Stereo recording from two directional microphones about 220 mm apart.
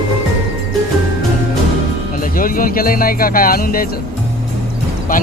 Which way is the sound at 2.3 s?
40° left (ahead or behind).